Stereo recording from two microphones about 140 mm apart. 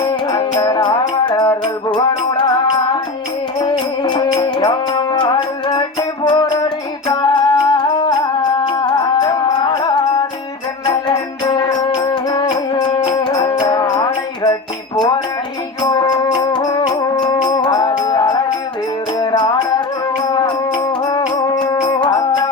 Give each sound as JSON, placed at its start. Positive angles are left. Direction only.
{"t": 0.0, "sound": "music", "side_deg": 25}
{"t": 15.8, "sound": "music", "side_deg": 30}